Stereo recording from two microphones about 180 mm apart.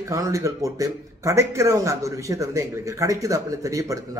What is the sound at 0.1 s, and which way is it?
A man's voice, 15° right (ahead or behind).